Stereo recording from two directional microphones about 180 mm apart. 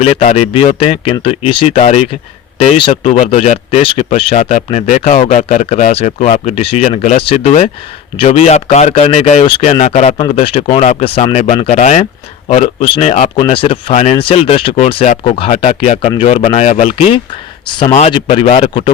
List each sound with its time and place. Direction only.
0.0 s speech: 35° left (ahead or behind)
10.2 s speech: 30° left (ahead or behind)